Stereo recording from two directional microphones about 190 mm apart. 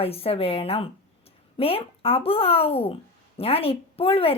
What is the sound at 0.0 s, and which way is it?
Speech, 30° left (ahead or behind).